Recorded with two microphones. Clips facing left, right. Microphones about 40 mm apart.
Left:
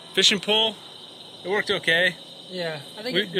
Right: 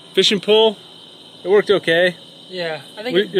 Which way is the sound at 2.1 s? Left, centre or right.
Right.